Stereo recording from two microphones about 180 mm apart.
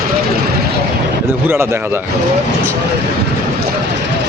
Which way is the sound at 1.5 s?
15° right (ahead or behind).